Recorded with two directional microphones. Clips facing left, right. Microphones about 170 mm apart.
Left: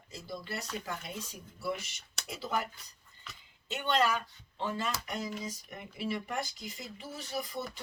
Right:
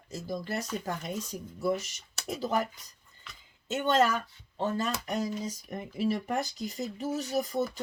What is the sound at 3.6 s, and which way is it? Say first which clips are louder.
Speech: right 4 dB; 45° right (ahead or behind).